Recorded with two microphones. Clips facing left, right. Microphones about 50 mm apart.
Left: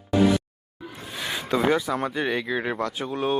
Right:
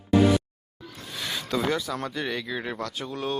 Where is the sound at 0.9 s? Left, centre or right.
Centre.